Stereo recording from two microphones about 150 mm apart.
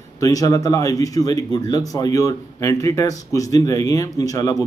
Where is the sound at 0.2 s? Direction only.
20° left (ahead or behind).